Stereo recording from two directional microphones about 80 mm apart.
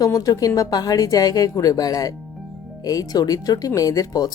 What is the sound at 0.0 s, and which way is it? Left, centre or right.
A woman's voice, left.